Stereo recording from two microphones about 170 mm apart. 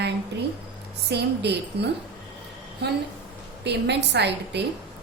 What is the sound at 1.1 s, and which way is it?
A woman's voice, 80° right.